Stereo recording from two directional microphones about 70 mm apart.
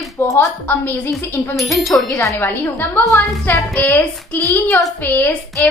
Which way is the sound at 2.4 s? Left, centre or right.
Left.